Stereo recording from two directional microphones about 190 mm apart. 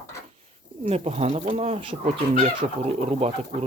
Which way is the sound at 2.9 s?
35° right (ahead or behind).